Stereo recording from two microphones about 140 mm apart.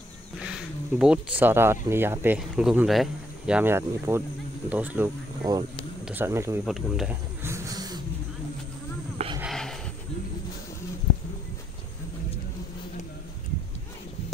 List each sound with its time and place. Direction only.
0.4 s speech: 5° right (ahead or behind)
2.3 s speech: 5° right (ahead or behind)
6.6 s speech: 5° right (ahead or behind)
7.4 s wild animals: 20° right (ahead or behind)
9.5 s a sound: 5° left (ahead or behind)